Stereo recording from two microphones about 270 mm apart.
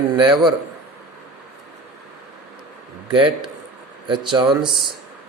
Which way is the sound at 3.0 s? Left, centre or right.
Centre.